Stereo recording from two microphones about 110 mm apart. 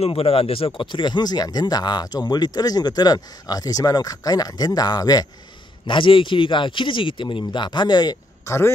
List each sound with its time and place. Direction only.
0.0 s speech: 65° left (ahead or behind); by 5.2 s 35° left (ahead or behind)
5.9 s speech: 50° left (ahead or behind)
8.5 s a man's voice: 25° left (ahead or behind)